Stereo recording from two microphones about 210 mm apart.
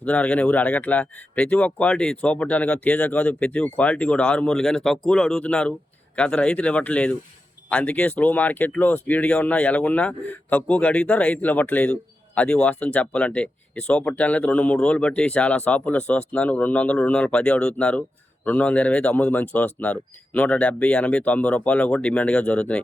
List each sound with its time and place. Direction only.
0.0 s speech: 5° left (ahead or behind)